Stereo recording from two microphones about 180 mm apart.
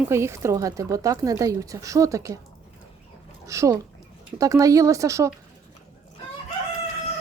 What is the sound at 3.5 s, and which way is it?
A woman's voice, 15° right (ahead or behind).